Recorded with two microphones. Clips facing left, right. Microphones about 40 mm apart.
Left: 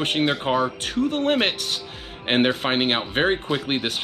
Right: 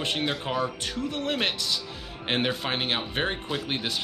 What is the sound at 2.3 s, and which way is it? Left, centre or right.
Speech, left.